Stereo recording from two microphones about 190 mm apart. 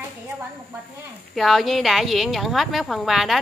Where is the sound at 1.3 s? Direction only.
Centre (ahead or behind).